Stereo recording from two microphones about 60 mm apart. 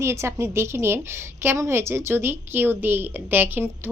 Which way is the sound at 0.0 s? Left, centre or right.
Right.